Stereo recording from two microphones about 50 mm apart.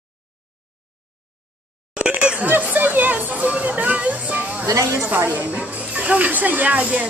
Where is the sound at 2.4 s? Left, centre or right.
Right.